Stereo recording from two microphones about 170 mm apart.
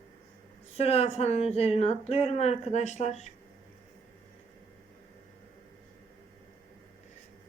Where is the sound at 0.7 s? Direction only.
35° left (ahead or behind).